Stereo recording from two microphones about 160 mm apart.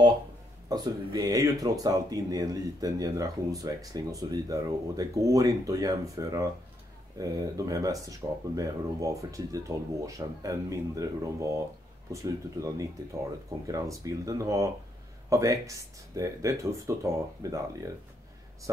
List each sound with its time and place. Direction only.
0.7 s speech: 25° right (ahead or behind)